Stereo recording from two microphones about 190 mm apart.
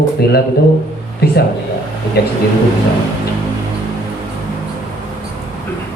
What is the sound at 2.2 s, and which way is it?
Speech, 55° left (ahead or behind).